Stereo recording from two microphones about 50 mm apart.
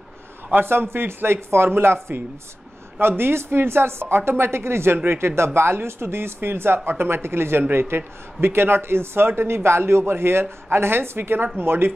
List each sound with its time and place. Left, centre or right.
0.6 s speech: right
3.0 s speech: right